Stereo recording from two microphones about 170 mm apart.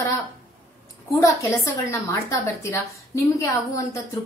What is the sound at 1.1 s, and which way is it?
A woman's voice, 20° left (ahead or behind).